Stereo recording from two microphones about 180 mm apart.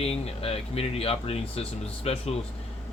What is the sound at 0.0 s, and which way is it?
Speech, 35° left (ahead or behind).